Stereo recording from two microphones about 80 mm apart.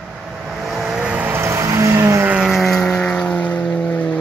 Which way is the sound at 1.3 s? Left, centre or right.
Right.